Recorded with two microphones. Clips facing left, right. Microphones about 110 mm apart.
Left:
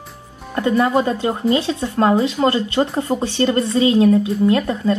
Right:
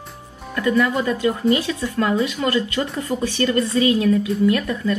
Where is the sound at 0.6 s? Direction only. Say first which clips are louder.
Left 3 dB; 30° left (ahead or behind).